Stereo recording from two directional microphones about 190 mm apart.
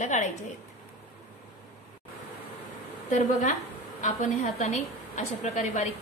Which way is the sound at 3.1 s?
40° left (ahead or behind).